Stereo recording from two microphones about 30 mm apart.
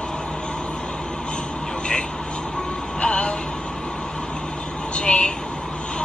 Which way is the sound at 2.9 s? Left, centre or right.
Left.